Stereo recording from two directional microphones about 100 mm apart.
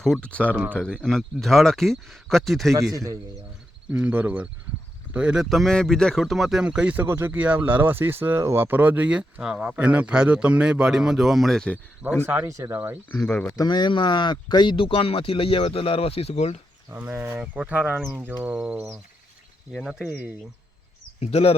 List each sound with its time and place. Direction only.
0.0 s speech: 5° left (ahead or behind)
0.3 s speech: 15° left (ahead or behind)
2.9 s a man's voice: 35° right (ahead or behind)
3.9 s speech: 15° right (ahead or behind)
5.5 s speech: centre (ahead or behind)
7.0 s speech: 25° right (ahead or behind); by 11.8 s 5° left (ahead or behind)
12.2 s a man's voice: 20° right (ahead or behind)
13.6 s speech: 45° left (ahead or behind); by 16.6 s 90° left
16.9 s speech: 20° right (ahead or behind)
19.7 s speech: 5° right (ahead or behind)
20.1 s speech: 15° right (ahead or behind)
21.2 s speech: 85° left